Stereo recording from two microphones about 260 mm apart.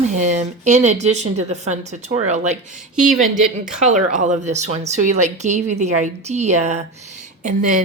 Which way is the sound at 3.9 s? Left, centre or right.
Right.